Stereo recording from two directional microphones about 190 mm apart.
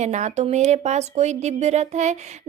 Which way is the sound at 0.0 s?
40° right (ahead or behind).